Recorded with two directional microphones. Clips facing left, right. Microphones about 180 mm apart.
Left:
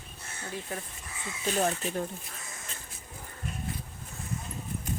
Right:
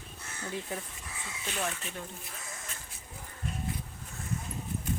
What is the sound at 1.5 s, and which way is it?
Speech, 40° left (ahead or behind).